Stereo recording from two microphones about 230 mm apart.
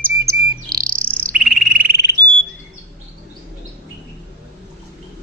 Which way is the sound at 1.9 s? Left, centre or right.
Right.